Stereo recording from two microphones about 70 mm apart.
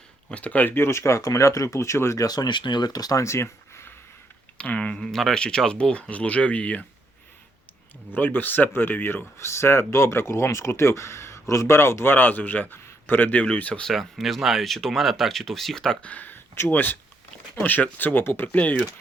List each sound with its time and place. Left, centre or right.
0.3 s speech: centre; by 2.2 s left
2.2 s speech: left
3.2 s a sound: left
4.5 s speech: centre
5.0 s speech: centre; by 6.8 s left
8.1 s speech: left
9.4 s speech: left
12.1 s speech: left
13.8 s speech: centre
16.0 s speech: left